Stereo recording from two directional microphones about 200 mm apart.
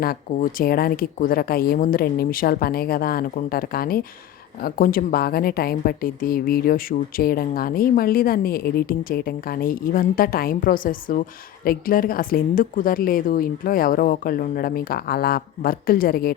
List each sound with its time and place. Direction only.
0.0 s a woman's voice: 50° left (ahead or behind)